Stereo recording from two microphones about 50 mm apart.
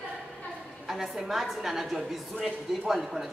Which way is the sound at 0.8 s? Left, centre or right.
Centre.